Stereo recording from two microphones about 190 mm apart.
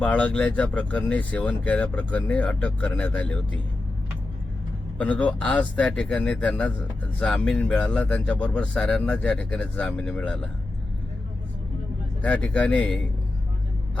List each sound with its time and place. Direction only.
0.0 s speech: 10° left (ahead or behind)
4.9 s speech: 5° left (ahead or behind)
12.2 s speech: 5° left (ahead or behind)